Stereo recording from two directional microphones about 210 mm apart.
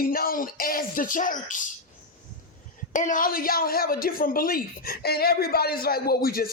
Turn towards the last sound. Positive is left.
turn(degrees=45)  # may be behind; listen again after turning